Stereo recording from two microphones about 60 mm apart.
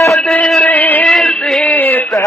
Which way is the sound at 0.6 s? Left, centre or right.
Left.